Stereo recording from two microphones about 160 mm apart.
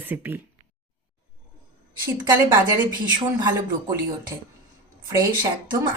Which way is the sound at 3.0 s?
25° right (ahead or behind).